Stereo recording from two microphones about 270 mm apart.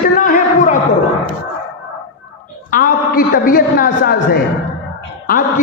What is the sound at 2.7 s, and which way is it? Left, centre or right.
A man's voice, left.